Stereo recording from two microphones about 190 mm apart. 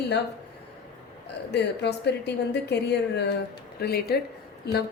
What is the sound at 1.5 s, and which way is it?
Speech, 60° left (ahead or behind).